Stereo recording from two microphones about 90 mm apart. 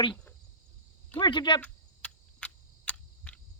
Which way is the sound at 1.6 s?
15° left (ahead or behind).